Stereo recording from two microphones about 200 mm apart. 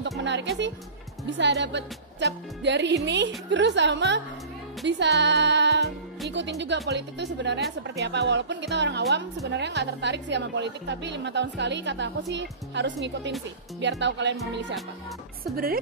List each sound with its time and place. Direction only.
0.2 s a woman's voice: 65° right (ahead or behind)
15.5 s a woman's voice: 45° right (ahead or behind)